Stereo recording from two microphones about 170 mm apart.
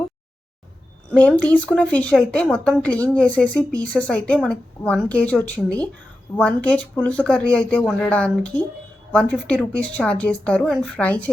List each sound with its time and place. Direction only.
1.1 s a woman's voice: 10° left (ahead or behind)